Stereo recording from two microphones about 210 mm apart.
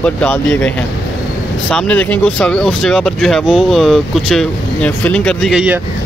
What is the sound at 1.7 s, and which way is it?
Speech, 5° left (ahead or behind).